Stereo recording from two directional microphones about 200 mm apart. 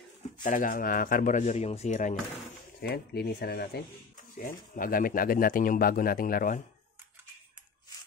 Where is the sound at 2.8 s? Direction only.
50° left (ahead or behind).